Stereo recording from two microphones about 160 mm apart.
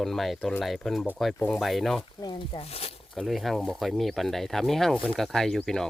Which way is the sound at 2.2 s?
30° left (ahead or behind).